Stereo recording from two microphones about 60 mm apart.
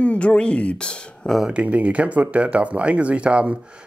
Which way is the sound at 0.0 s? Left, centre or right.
Left.